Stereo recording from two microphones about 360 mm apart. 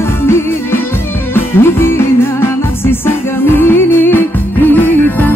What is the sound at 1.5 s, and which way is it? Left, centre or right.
Music, centre.